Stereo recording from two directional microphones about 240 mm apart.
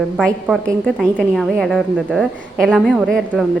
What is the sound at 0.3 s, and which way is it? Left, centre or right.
A woman's voice, centre.